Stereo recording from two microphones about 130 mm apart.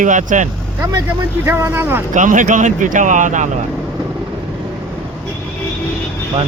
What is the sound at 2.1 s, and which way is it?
Speech, 75° right (ahead or behind).